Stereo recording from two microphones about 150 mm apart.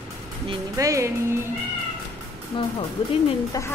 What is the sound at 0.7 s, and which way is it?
Speech, 20° right (ahead or behind).